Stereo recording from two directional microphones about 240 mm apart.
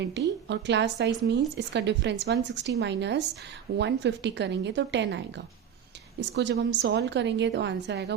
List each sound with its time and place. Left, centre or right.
0.0 s a woman's voice: right